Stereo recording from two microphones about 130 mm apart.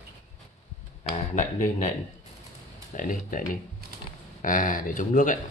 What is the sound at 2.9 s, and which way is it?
Speech, 90° left.